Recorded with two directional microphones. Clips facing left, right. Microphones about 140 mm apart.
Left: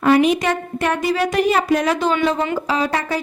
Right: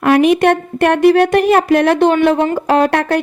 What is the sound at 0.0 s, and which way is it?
Speech, 60° right (ahead or behind).